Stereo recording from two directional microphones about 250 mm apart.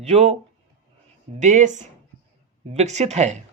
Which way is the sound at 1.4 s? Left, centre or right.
Right.